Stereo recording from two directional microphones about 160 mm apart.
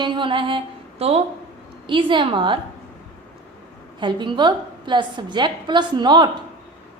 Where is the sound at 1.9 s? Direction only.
30° right (ahead or behind).